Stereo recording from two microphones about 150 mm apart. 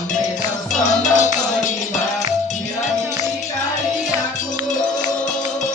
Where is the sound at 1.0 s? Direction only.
55° left (ahead or behind).